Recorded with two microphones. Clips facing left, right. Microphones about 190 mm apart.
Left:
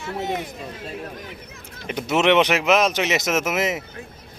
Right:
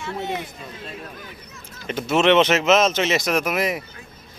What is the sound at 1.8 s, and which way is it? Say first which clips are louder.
Speech: right 1 dB; 15° left (ahead or behind).